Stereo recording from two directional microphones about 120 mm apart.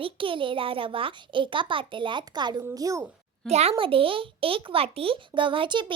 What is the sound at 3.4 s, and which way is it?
Speech, 65° right (ahead or behind).